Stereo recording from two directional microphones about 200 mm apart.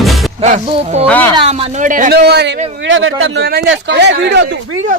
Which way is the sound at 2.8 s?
75° right (ahead or behind).